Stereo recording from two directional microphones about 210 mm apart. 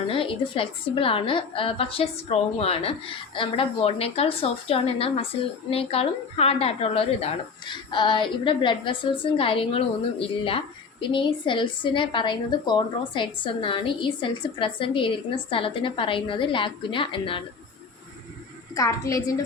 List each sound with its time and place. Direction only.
0.1 s a woman's voice: 25° left (ahead or behind)
18.7 s a woman's voice: 15° left (ahead or behind)